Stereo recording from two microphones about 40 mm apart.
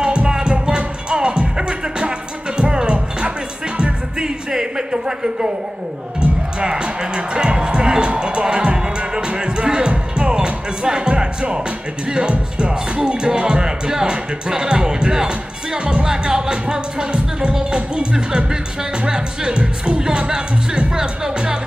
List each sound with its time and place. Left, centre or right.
0.0 s music: right
4.5 s a sound: centre
6.6 s music: right